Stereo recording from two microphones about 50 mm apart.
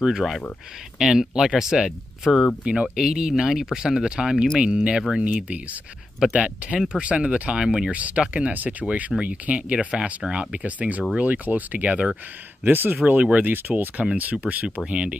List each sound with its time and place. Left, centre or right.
0.0 s speech: centre
2.6 s speech: right
7.9 s speech: right
12.6 s speech: right
13.0 s speech: right